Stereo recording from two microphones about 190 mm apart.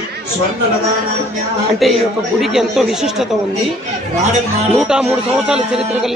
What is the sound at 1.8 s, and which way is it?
A man's voice, centre (ahead or behind).